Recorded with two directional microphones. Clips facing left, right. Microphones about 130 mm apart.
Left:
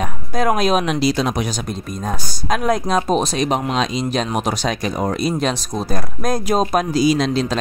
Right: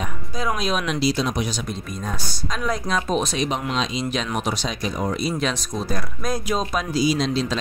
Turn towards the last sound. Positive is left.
turn(degrees=55)  # may be behind; listen again after turning